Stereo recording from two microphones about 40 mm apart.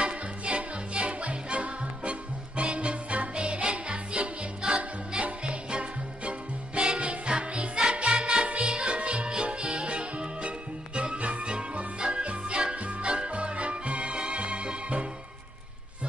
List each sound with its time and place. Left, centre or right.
0.0 s music: right
8.2 s music: centre